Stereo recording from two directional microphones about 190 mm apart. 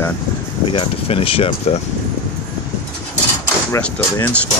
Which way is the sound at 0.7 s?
30° left (ahead or behind).